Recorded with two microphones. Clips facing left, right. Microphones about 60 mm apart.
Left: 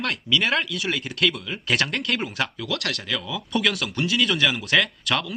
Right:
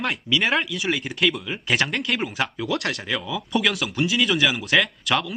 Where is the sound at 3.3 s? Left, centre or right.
Centre.